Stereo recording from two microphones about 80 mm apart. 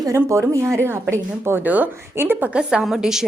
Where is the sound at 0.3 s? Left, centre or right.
Right.